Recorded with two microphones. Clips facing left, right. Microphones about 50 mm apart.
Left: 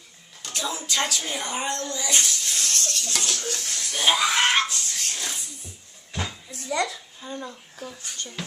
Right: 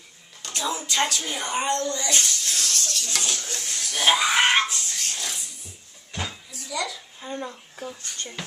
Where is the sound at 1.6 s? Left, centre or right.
Centre.